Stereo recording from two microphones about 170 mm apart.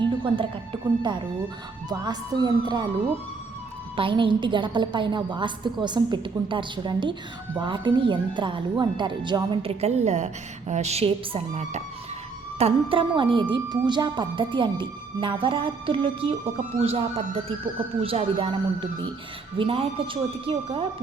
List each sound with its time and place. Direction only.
0.0 s speech: 30° right (ahead or behind)
3.9 s speech: 30° right (ahead or behind)